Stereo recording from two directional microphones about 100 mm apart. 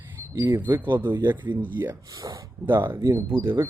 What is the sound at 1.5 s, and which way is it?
Speech, 20° right (ahead or behind).